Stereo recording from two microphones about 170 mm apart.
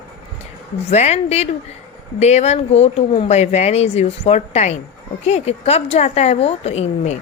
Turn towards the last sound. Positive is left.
turn(degrees=40)  # may be behind; listen again after turning